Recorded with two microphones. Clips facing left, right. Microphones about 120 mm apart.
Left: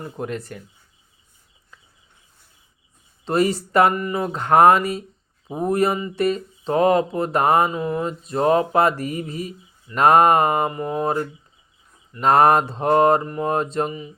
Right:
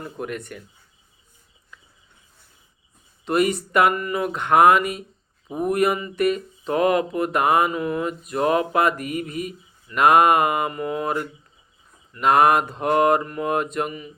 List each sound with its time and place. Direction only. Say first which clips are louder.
0.2 s speech: left 2 dB; 30° left (ahead or behind)
3.2 s speech: left 1 dB; 30° left (ahead or behind)
10.7 s a sound: left 2 dB; 25° left (ahead or behind)
12.2 s speech: left 2 dB; 35° left (ahead or behind)